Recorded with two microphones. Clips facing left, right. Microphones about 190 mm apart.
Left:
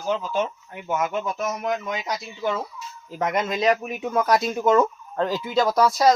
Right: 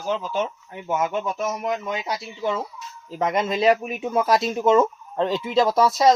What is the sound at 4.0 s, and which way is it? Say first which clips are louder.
Speech: right 1 dB; 25° right (ahead or behind).